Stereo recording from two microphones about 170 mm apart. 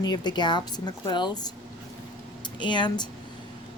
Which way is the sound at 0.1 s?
25° left (ahead or behind).